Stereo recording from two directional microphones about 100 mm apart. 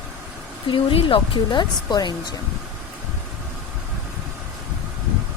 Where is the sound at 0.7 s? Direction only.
60° left (ahead or behind).